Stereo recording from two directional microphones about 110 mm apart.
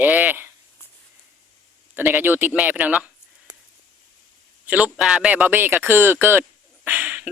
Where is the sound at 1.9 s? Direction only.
20° right (ahead or behind).